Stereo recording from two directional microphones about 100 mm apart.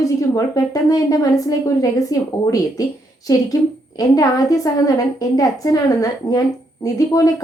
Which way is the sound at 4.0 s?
35° left (ahead or behind).